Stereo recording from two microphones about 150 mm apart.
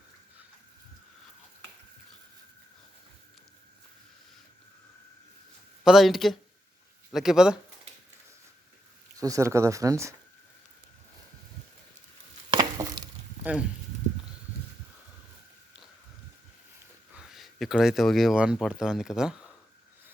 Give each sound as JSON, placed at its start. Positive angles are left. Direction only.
{"t": 5.8, "sound": "speech", "side_deg": 0}
{"t": 9.1, "sound": "speech", "side_deg": -20}
{"t": 12.5, "sound": "a sound", "side_deg": -25}
{"t": 13.4, "sound": "speech", "side_deg": -10}
{"t": 17.2, "sound": "speech", "side_deg": 0}